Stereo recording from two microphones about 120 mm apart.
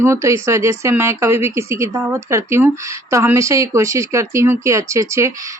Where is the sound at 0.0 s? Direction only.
25° right (ahead or behind).